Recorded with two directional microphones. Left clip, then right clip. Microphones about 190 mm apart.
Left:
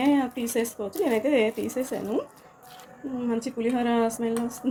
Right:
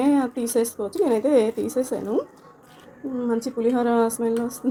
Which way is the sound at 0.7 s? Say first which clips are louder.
Right 4 dB; 20° right (ahead or behind).